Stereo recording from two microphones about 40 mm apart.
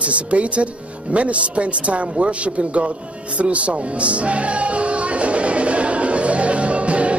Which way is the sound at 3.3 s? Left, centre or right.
Right.